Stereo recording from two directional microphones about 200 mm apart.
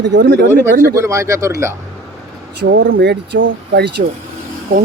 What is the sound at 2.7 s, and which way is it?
Speech, 70° right (ahead or behind).